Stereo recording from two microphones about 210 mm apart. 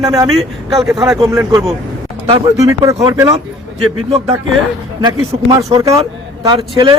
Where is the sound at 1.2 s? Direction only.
15° right (ahead or behind).